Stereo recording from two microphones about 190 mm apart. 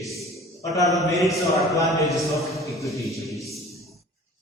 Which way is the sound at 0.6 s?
15° left (ahead or behind).